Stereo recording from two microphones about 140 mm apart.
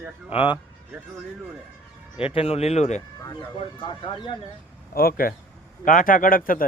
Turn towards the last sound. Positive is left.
turn(degrees=85)